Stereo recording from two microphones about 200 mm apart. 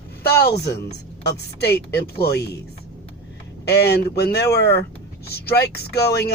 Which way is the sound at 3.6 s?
55° left (ahead or behind).